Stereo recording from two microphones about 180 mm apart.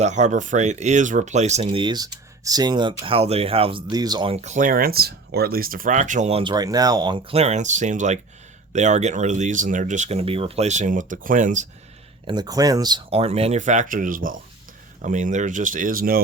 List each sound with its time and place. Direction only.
0.0 s speech: 40° right (ahead or behind)
1.6 s speech: 25° right (ahead or behind); by 11.7 s 45° right (ahead or behind)
12.2 s speech: 25° right (ahead or behind)
13.1 s speech: 35° right (ahead or behind); by 16.2 s 55° right (ahead or behind)